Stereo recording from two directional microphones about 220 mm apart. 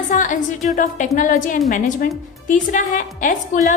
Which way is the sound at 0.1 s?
35° left (ahead or behind).